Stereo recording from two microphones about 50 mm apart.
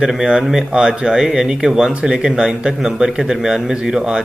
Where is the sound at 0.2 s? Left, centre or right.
Centre.